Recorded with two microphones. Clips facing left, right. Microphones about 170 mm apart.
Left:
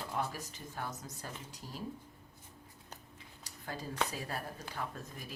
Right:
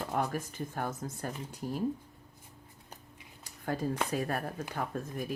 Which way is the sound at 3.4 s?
55° right (ahead or behind).